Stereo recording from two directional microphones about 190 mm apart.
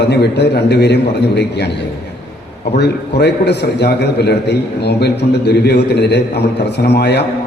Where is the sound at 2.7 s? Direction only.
60° left (ahead or behind).